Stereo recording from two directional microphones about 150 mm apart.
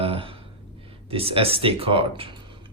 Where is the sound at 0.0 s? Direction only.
40° right (ahead or behind).